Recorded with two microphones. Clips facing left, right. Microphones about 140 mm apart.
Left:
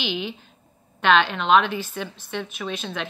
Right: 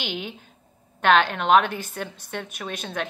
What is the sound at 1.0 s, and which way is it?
A woman's voice, 45° right (ahead or behind).